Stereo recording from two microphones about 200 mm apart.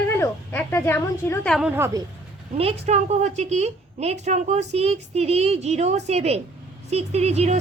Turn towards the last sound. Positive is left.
turn(degrees=-30)  # may be behind; listen again after turning